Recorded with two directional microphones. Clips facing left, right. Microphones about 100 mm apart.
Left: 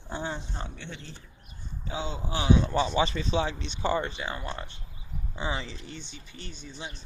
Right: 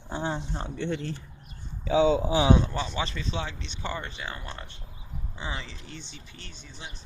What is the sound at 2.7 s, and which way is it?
Speech, 15° left (ahead or behind).